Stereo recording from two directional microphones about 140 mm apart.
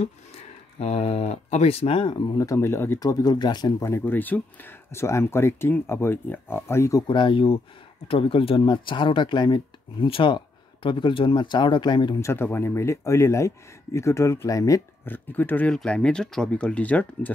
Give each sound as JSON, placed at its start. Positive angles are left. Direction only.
{"t": 0.7, "sound": "speech", "side_deg": 50}
{"t": 2.4, "sound": "speech", "side_deg": 20}
{"t": 7.1, "sound": "speech", "side_deg": 35}
{"t": 12.2, "sound": "speech", "side_deg": 15}